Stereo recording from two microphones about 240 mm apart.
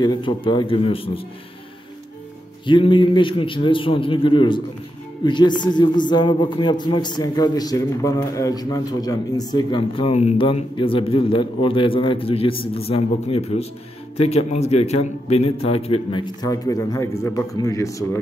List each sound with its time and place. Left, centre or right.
0.0 s a man's voice: centre
2.6 s a man's voice: centre